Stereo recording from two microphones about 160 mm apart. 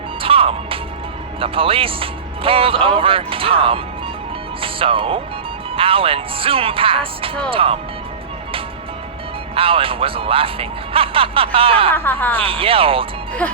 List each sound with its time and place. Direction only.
0.2 s music: 35° right (ahead or behind)
1.4 s speech: 35° right (ahead or behind)
9.6 s speech: 35° right (ahead or behind)
11.9 s speech: 10° left (ahead or behind)
12.4 s speech: 35° right (ahead or behind)
13.4 s speech: 10° left (ahead or behind)